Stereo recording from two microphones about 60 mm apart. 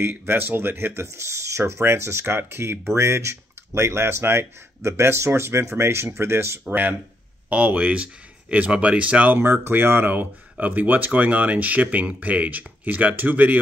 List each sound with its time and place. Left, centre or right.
0.0 s speech: right
1.0 s speech: right
6.6 s speech: right
9.4 s speech: right